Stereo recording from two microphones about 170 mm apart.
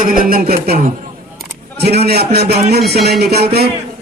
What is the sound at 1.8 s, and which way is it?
Music, 70° right (ahead or behind).